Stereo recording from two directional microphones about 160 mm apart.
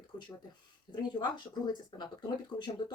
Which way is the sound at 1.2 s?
25° left (ahead or behind).